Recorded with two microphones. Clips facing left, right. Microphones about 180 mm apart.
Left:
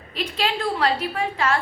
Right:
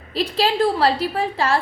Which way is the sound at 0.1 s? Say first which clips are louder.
Right 5 dB; 35° right (ahead or behind).